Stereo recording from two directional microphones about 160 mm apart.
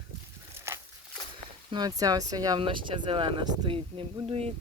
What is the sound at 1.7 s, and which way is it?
Speech, 25° right (ahead or behind).